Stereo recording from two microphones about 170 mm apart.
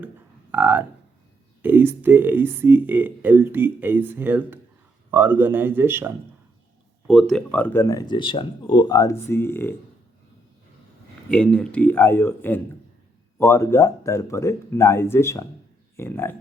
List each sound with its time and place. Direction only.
0.5 s speech: 10° right (ahead or behind)
7.1 s speech: centre (ahead or behind)
11.3 s speech: 5° left (ahead or behind)